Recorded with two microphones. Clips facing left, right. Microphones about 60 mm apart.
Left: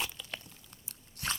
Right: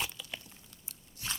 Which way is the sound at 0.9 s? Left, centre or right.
Left.